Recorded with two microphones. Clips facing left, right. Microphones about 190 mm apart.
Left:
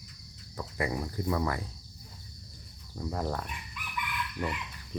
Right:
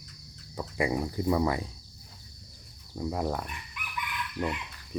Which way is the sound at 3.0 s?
15° right (ahead or behind).